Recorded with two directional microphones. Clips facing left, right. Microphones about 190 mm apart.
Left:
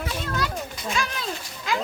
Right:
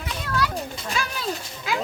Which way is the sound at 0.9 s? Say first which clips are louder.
Even; centre (ahead or behind).